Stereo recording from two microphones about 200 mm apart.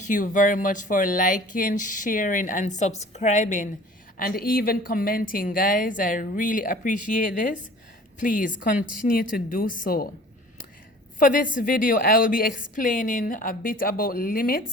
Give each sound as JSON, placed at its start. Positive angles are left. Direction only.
{"t": 0.0, "sound": "a woman's voice", "side_deg": 40}
{"t": 11.2, "sound": "a woman's voice", "side_deg": 45}